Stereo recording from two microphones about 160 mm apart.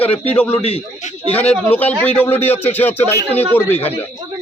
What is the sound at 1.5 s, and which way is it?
Speech, 10° left (ahead or behind).